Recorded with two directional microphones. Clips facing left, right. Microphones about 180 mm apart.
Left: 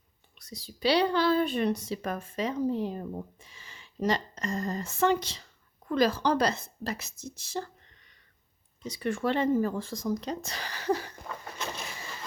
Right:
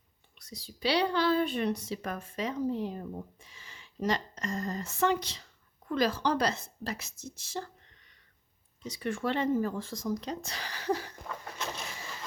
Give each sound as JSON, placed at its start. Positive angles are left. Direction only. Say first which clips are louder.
{"t": 0.3, "sound": "speech", "louder": "left 2 dB", "side_deg": 40}
{"t": 5.9, "sound": "speech", "louder": "left 3 dB", "side_deg": 40}
{"t": 8.9, "sound": "speech", "louder": "left 3 dB", "side_deg": 40}
{"t": 11.3, "sound": "vehicle", "louder": "left 1 dB", "side_deg": 0}